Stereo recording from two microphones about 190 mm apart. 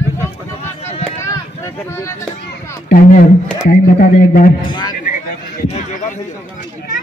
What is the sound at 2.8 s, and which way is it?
A man's voice, 50° left (ahead or behind).